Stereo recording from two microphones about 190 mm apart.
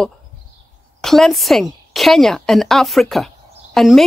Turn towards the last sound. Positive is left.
turn(degrees=0)  # may be behind; listen again after turning